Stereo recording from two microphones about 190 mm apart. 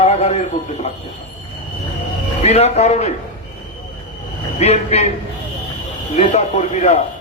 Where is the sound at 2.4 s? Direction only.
35° left (ahead or behind).